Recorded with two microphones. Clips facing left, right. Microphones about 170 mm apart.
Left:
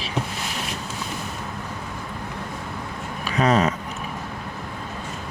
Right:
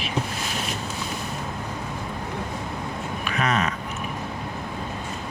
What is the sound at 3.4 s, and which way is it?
Speech, 35° left (ahead or behind).